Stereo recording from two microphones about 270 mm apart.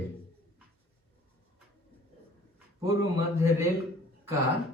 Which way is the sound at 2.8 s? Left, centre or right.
Centre.